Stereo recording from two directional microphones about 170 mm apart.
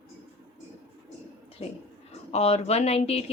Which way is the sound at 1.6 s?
40° left (ahead or behind).